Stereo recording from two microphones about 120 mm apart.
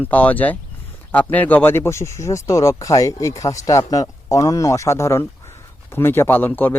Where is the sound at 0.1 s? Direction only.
15° left (ahead or behind).